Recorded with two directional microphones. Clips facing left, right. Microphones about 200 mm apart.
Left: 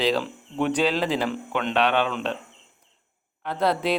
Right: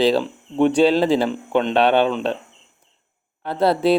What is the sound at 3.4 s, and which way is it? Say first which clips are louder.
Speech: right 6 dB; 30° right (ahead or behind).